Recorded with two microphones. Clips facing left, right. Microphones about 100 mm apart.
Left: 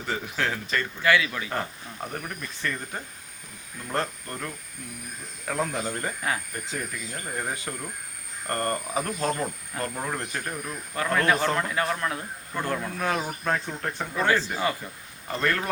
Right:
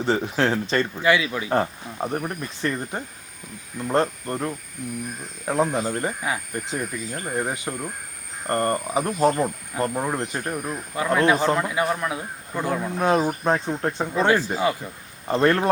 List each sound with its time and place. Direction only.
0.0 s speech: 30° right (ahead or behind)
5.7 s speech: 25° right (ahead or behind)
10.9 s a man's voice: 15° right (ahead or behind)
15.3 s speech: 30° right (ahead or behind)